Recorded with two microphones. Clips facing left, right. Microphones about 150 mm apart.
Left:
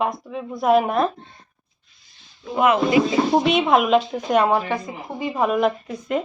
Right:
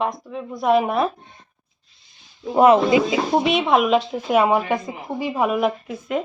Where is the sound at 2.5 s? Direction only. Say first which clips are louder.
Right 5 dB; 35° right (ahead or behind).